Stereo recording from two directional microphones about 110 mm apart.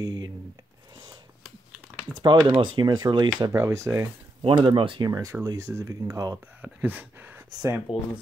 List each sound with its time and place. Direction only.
0.0 s speech: 35° right (ahead or behind)
2.2 s speech: 45° right (ahead or behind)
3.5 s speech: 25° right (ahead or behind)
4.4 s speech: 45° right (ahead or behind)
5.1 s speech: 30° right (ahead or behind)
6.6 s speech: 15° right (ahead or behind)
7.9 s speech: 60° left (ahead or behind)